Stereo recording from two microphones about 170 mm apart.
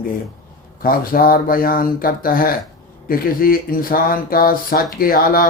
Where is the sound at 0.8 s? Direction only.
60° left (ahead or behind).